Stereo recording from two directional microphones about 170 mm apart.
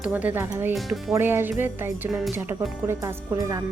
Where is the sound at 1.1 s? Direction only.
15° right (ahead or behind).